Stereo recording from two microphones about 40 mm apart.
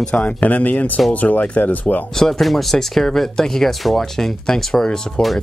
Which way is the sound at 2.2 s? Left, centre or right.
Centre.